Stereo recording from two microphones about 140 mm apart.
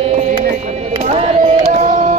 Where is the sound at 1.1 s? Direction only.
50° right (ahead or behind).